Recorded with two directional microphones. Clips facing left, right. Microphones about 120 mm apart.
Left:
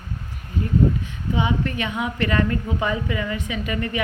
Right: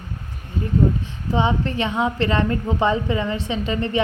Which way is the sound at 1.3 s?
30° right (ahead or behind).